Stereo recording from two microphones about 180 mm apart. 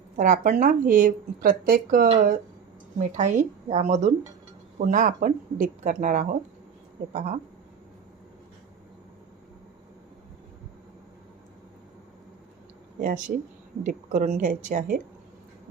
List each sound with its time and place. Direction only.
0.2 s a woman's voice: 45° right (ahead or behind)
13.0 s speech: 50° right (ahead or behind)